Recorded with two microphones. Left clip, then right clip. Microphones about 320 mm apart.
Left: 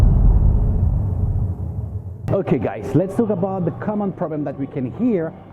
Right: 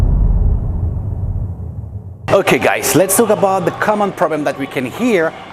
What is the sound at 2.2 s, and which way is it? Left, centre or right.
Speech, centre.